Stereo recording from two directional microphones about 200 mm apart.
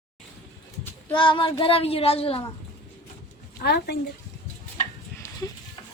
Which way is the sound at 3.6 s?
55° left (ahead or behind).